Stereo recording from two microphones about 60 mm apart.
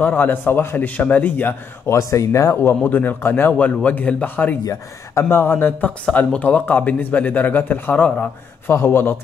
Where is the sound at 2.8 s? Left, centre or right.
Left.